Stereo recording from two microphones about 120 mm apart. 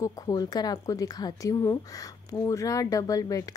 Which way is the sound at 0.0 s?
30° left (ahead or behind).